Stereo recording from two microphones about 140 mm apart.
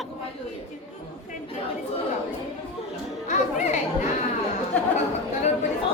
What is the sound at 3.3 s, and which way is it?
Music, 60° left (ahead or behind).